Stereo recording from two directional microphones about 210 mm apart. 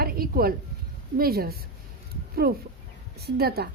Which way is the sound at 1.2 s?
45° right (ahead or behind).